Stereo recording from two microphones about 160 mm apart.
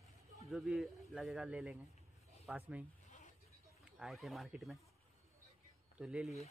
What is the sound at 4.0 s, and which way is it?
Speech, centre (ahead or behind).